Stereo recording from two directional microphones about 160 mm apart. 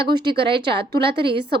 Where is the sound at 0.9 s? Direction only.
90° right.